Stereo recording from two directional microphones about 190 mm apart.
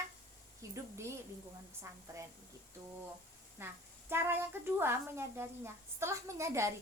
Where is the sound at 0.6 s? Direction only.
15° right (ahead or behind).